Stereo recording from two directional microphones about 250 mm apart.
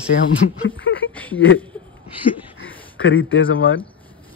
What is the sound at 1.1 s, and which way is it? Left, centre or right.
Speech, centre.